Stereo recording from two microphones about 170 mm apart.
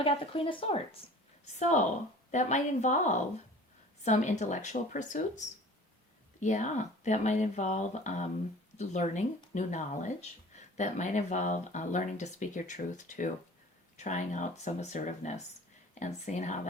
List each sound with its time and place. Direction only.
0.0 s speech: 30° left (ahead or behind)
1.5 s speech: 45° left (ahead or behind)
6.4 s speech: 45° left (ahead or behind)